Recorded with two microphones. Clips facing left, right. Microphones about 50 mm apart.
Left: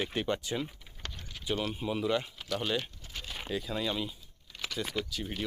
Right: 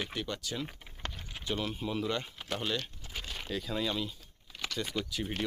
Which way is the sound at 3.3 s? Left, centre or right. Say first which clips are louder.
Left 1 dB; centre.